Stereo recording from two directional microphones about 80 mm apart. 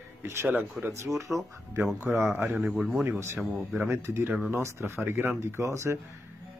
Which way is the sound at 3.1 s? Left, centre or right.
Right.